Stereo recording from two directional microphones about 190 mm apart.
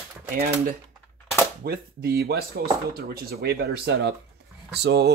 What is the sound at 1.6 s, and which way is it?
Speech, 55° right (ahead or behind).